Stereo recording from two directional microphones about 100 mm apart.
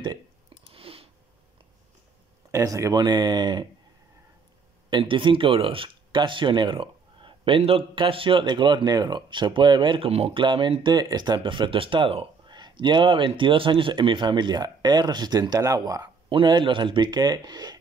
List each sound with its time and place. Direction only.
0.7 s a sound: 70° right (ahead or behind)
2.5 s a man's voice: 35° right (ahead or behind)
4.8 s speech: 55° right (ahead or behind); by 10.4 s 75° right (ahead or behind)
10.4 s a man's voice: 55° right (ahead or behind)
12.4 s a man's voice: 50° right (ahead or behind)
16.3 s a man's voice: 55° right (ahead or behind)